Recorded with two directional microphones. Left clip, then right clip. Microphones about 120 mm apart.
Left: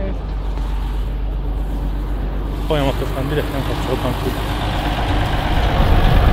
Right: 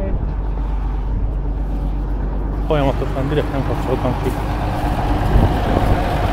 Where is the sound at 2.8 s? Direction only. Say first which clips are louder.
Right 1 dB; 70° right (ahead or behind).